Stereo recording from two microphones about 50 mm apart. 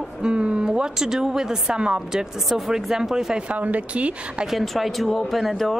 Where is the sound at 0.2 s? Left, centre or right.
Right.